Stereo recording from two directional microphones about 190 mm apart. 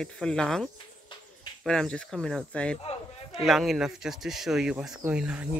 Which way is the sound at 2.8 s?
30° left (ahead or behind).